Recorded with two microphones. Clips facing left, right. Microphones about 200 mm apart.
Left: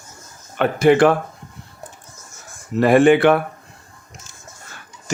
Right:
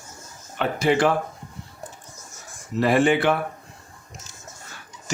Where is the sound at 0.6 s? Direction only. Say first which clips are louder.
Left 7 dB; 55° left (ahead or behind).